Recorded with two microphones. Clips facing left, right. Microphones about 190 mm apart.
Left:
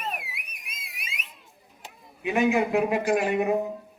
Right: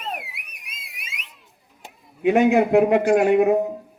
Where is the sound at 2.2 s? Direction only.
60° right (ahead or behind).